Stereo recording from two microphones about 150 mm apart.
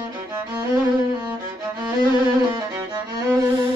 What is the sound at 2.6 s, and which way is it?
Violin, 25° right (ahead or behind).